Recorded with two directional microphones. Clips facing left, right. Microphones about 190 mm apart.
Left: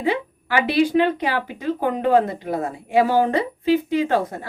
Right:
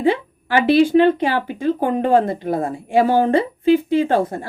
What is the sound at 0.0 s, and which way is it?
Speech, 30° right (ahead or behind).